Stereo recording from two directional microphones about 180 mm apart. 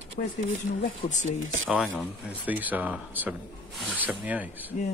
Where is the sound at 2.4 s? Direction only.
10° right (ahead or behind).